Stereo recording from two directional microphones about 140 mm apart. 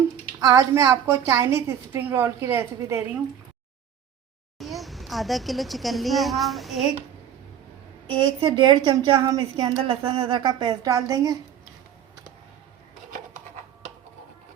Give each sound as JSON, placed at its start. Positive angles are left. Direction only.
{"t": 0.3, "sound": "a woman's voice", "side_deg": -25}
{"t": 4.5, "sound": "a woman's voice", "side_deg": 0}
{"t": 8.1, "sound": "a woman's voice", "side_deg": -30}
{"t": 9.8, "sound": "a woman's voice", "side_deg": -40}